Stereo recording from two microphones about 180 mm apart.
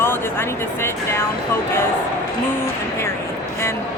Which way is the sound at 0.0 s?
10° left (ahead or behind).